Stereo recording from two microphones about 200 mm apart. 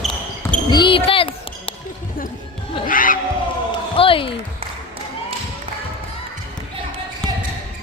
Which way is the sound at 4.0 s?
25° left (ahead or behind).